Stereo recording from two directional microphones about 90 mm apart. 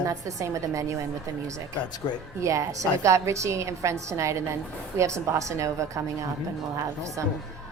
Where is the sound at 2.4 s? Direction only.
35° right (ahead or behind).